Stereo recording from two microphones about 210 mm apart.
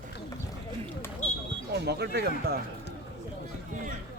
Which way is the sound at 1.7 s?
50° right (ahead or behind).